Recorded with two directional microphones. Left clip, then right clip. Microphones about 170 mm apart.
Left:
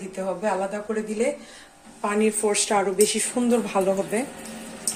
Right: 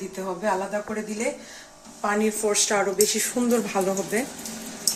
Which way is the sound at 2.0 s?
15° left (ahead or behind).